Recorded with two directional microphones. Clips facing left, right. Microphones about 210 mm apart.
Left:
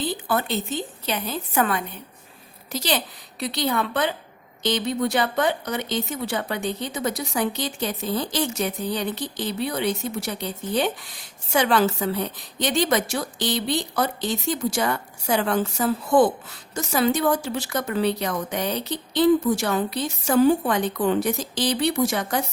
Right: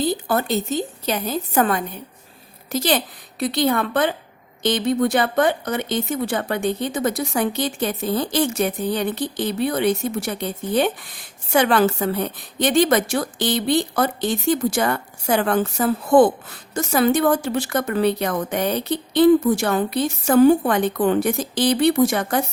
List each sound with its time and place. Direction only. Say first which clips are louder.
0.0 s speech: right 4 dB; 40° right (ahead or behind)
2.7 s a woman's voice: right 5 dB; 50° right (ahead or behind)